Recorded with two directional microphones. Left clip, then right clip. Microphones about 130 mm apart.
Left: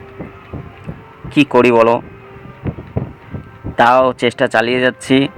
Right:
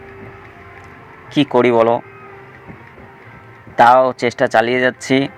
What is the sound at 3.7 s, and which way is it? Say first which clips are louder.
Speech: right 1 dB; 25° left (ahead or behind).